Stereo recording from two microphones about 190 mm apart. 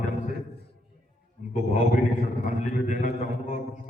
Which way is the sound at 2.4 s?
40° left (ahead or behind).